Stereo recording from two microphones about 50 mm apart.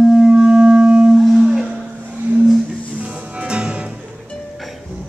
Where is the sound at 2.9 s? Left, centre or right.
Right.